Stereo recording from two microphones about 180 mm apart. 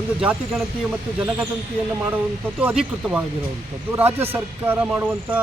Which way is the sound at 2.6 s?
5° right (ahead or behind).